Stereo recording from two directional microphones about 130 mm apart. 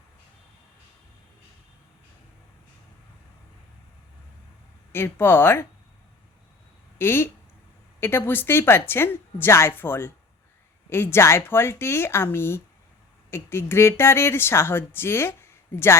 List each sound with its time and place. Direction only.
4.9 s a woman's voice: 20° left (ahead or behind)
7.0 s a woman's voice: 15° left (ahead or behind)